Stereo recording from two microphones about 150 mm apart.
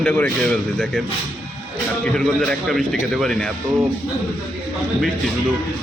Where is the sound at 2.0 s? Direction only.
5° left (ahead or behind).